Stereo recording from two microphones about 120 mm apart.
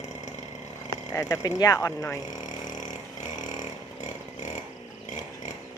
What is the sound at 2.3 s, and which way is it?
Vehicle, 90° left.